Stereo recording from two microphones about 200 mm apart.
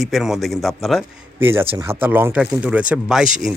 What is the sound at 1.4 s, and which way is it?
Speech, 10° right (ahead or behind).